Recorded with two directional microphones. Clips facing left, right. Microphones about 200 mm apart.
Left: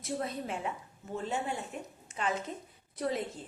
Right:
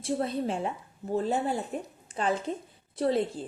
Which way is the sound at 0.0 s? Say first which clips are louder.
Right 7 dB; 30° right (ahead or behind).